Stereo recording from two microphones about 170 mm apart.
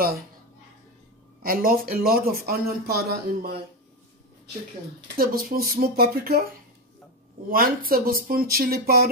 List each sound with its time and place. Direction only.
1.4 s a man's voice: 55° right (ahead or behind)
5.1 s a man's voice: 60° right (ahead or behind)
7.4 s a man's voice: 60° right (ahead or behind)